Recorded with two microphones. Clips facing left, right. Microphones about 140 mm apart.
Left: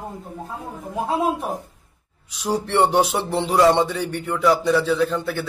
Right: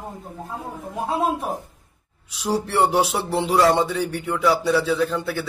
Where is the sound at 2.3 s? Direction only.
5° right (ahead or behind).